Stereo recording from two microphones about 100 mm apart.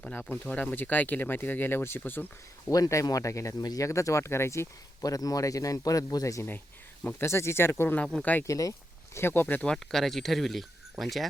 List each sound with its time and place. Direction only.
0.0 s speech: 15° left (ahead or behind)
2.6 s speech: 35° left (ahead or behind)
8.0 s speech: 10° left (ahead or behind)
8.4 s speech: 35° left (ahead or behind)
9.1 s speech: 25° left (ahead or behind)
9.6 s speech: 5° left (ahead or behind)